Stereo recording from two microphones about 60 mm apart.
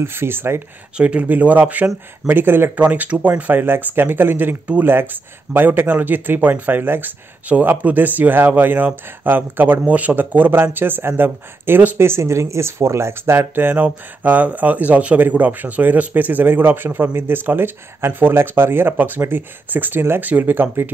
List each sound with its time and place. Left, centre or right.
0.0 s speech: right
0.9 s speech: right
2.7 s speech: right
12.0 s speech: right